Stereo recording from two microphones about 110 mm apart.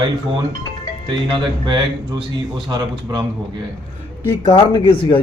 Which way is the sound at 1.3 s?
45° right (ahead or behind).